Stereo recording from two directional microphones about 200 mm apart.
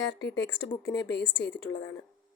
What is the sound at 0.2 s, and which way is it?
Speech, 60° left (ahead or behind).